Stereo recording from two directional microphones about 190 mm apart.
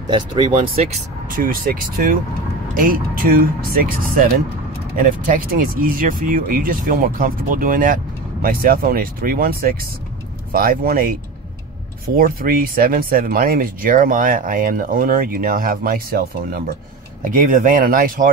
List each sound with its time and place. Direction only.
0.1 s speech: 25° right (ahead or behind); by 11.1 s 50° right (ahead or behind)
12.2 s speech: 50° right (ahead or behind)